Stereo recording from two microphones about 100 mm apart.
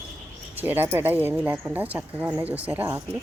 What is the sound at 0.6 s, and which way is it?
Speech, 20° right (ahead or behind).